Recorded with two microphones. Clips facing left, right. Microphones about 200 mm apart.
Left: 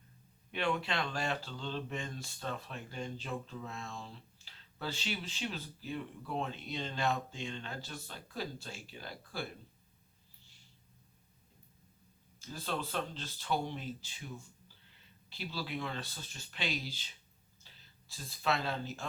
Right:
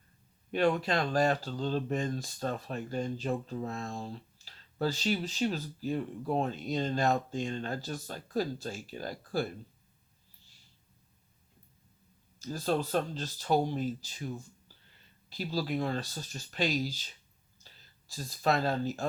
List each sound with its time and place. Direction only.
0.5 s speech: 40° right (ahead or behind)
12.4 s speech: 40° right (ahead or behind)
18.1 s speech: 40° right (ahead or behind)